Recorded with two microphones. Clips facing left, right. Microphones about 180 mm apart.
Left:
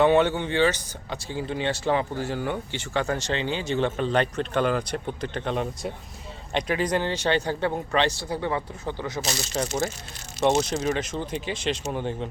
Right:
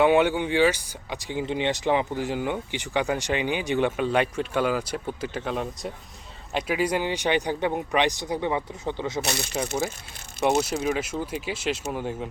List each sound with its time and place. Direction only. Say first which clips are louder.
0.0 s speech: even; 10° right (ahead or behind)
9.2 s speech: right 1 dB; 60° right (ahead or behind)
10.4 s speech: left 1 dB; 5° right (ahead or behind)